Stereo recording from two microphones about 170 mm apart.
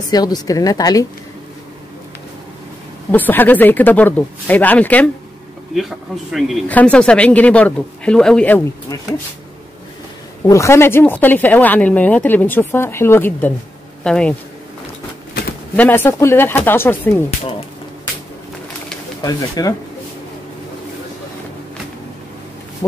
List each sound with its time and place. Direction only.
0.1 s a woman's voice: 25° left (ahead or behind)
3.1 s speech: 10° left (ahead or behind)
10.4 s speech: 15° left (ahead or behind)
15.7 s speech: 10° left (ahead or behind)
19.2 s a woman's voice: 20° left (ahead or behind)